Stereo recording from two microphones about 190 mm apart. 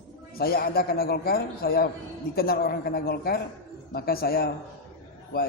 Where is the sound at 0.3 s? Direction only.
55° left (ahead or behind).